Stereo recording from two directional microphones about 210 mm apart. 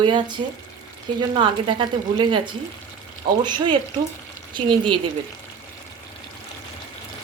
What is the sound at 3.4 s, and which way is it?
Speech, 20° right (ahead or behind).